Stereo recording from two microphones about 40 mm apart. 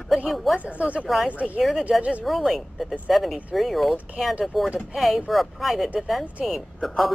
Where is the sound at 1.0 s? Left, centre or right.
Centre.